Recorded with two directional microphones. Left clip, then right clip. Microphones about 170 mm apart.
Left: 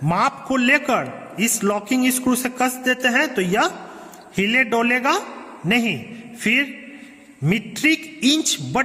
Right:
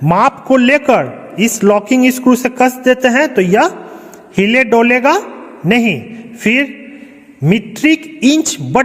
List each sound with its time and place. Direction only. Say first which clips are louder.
0.0 s a man's voice: right 9 dB; 30° right (ahead or behind)